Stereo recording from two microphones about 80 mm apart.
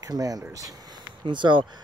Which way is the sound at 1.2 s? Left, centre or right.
Right.